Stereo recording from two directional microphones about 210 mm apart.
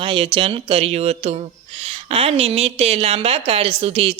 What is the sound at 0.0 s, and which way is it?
A woman's voice, 25° right (ahead or behind).